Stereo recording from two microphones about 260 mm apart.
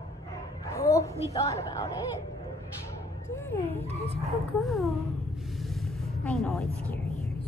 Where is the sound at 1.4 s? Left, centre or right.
Centre.